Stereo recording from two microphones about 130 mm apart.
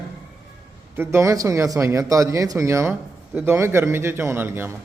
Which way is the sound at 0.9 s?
20° right (ahead or behind).